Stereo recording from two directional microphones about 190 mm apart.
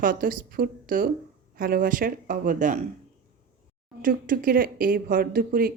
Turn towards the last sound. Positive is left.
turn(degrees=-50)  # may be behind; listen again after turning